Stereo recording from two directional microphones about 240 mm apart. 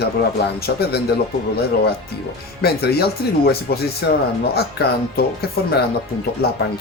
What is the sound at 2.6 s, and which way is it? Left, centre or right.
Speech, left.